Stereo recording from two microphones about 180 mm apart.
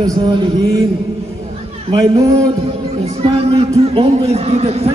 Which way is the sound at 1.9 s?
25° right (ahead or behind).